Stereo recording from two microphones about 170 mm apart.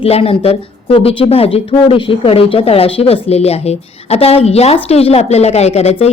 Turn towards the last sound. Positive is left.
turn(degrees=40)  # may be behind; listen again after turning